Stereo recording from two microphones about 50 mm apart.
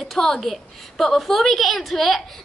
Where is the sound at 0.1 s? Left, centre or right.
Centre.